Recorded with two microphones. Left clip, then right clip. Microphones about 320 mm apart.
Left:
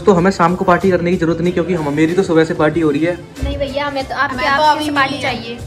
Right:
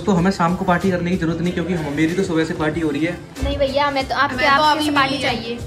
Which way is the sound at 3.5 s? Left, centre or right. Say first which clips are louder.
Right 2 dB; right.